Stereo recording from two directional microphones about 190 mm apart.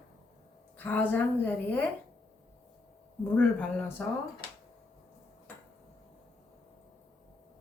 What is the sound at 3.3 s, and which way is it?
Speech, 5° left (ahead or behind).